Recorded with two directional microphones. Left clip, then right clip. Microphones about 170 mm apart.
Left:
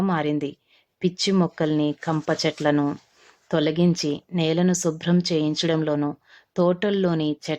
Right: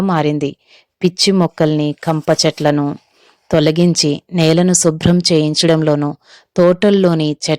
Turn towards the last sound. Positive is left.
turn(degrees=-40)  # may be behind; listen again after turning